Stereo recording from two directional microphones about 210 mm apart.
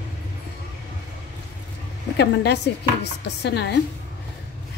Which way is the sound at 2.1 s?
55° left (ahead or behind).